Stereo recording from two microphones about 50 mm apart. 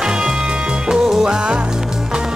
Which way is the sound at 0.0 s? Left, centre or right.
Centre.